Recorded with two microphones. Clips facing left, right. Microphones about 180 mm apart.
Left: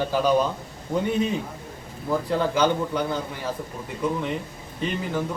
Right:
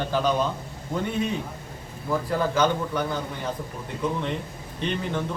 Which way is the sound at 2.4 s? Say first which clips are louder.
Left 1 dB; 15° left (ahead or behind).